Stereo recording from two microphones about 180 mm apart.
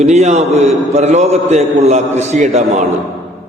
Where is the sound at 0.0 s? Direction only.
40° right (ahead or behind).